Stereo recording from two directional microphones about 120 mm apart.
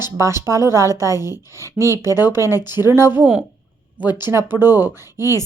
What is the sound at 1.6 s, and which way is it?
Speech, 25° left (ahead or behind).